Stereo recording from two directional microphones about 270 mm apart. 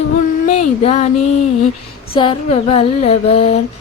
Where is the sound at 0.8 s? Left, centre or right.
Left.